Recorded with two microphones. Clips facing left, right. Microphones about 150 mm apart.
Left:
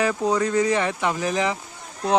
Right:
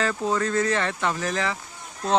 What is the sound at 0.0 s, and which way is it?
Speech, 15° left (ahead or behind).